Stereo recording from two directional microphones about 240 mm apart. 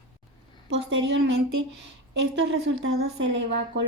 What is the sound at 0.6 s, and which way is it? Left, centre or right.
Speech, right.